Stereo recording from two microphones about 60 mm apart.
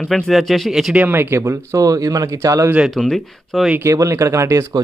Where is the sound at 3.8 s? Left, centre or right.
Right.